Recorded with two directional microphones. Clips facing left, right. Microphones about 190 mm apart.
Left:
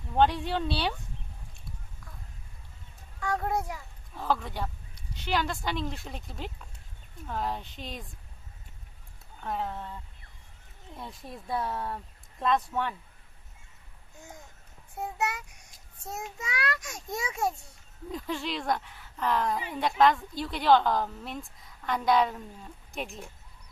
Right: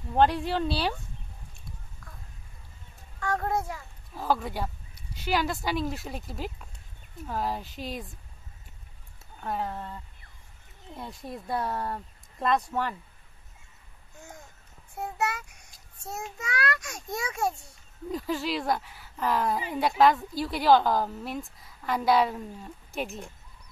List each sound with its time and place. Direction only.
0.1 s speech: centre (ahead or behind)
3.2 s a child's voice: 10° left (ahead or behind)
4.1 s speech: 5° right (ahead or behind)
9.4 s speech: 5° right (ahead or behind)
11.0 s speech: centre (ahead or behind)
15.1 s a child's voice: 15° left (ahead or behind)
18.1 s speech: 5° right (ahead or behind)